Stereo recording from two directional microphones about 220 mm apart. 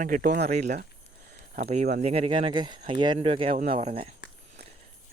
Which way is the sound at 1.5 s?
30° right (ahead or behind).